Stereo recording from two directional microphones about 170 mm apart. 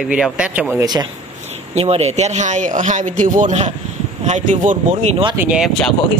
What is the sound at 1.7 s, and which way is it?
Speech, 40° right (ahead or behind).